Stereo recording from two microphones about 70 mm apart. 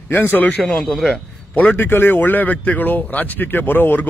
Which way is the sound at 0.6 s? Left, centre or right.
Centre.